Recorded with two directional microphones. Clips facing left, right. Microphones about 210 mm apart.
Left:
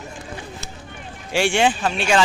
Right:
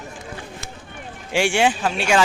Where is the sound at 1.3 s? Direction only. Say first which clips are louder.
Even; 10° right (ahead or behind).